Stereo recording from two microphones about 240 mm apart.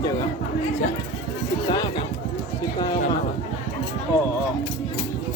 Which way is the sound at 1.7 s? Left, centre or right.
Centre.